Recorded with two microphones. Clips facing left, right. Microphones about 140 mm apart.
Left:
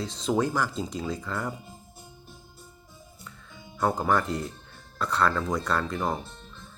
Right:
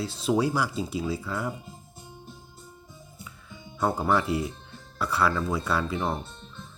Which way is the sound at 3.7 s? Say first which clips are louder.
Even; 10° right (ahead or behind).